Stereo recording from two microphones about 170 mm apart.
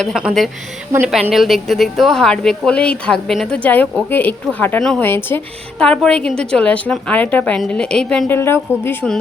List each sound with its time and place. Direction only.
0.0 s a woman's voice: centre (ahead or behind)